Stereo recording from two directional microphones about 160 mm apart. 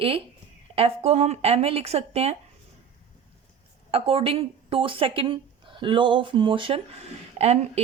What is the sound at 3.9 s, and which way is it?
Speech, 35° right (ahead or behind).